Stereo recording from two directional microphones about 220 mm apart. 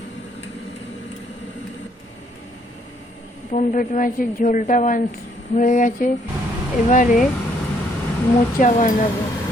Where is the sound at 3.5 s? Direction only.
35° left (ahead or behind).